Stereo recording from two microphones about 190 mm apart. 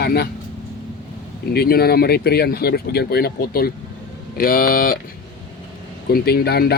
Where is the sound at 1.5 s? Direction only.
55° left (ahead or behind).